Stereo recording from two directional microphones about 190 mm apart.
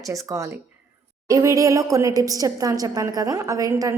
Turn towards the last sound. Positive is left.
turn(degrees=-20)  # may be behind; listen again after turning